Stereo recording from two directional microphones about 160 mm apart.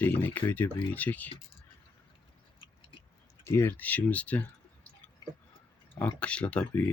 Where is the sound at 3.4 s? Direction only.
15° left (ahead or behind).